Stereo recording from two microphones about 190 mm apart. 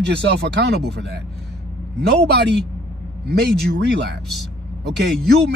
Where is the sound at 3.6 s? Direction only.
60° right (ahead or behind).